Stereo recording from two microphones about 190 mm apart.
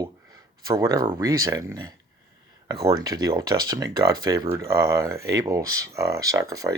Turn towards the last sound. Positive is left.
turn(degrees=-20)  # may be behind; listen again after turning